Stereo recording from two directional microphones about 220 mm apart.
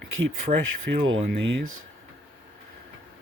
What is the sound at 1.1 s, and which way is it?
Speech, 60° right (ahead or behind).